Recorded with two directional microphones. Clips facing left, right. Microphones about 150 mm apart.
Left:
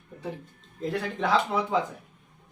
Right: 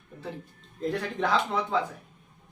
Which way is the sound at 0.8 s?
Centre (ahead or behind).